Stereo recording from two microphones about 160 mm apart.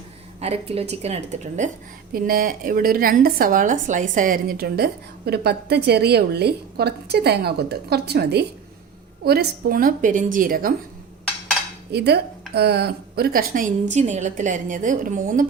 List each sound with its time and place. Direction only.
0.3 s a woman's voice: 40° right (ahead or behind)
2.1 s a woman's voice: 65° right (ahead or behind)
11.9 s a woman's voice: 90° right; by 15.4 s 55° right (ahead or behind)